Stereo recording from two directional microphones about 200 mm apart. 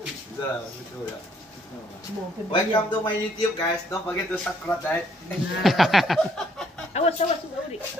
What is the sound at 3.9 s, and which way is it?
A man's voice, 10° left (ahead or behind).